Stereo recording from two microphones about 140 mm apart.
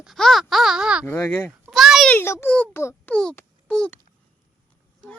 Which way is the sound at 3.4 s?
5° left (ahead or behind).